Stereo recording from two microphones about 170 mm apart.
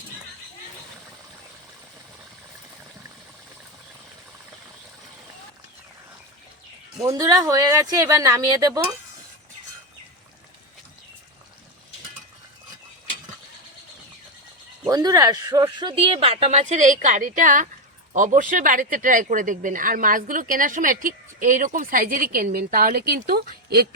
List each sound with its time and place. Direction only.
7.0 s speech: 20° right (ahead or behind)
14.8 s speech: 20° right (ahead or behind); by 23.8 s 65° right (ahead or behind)